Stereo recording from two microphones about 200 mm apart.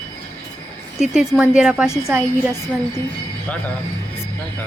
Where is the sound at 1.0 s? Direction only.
Centre (ahead or behind).